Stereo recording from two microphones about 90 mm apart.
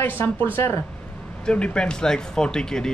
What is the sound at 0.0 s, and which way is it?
Speech, 20° left (ahead or behind).